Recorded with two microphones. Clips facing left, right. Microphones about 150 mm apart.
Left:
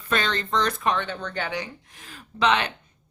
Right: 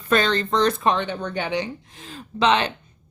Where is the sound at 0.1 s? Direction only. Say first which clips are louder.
Right 5 dB; 35° right (ahead or behind).